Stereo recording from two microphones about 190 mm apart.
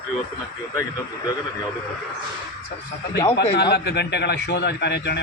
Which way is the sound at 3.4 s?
60° left (ahead or behind).